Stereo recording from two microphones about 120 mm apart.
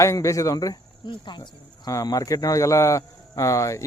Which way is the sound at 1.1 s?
40° left (ahead or behind).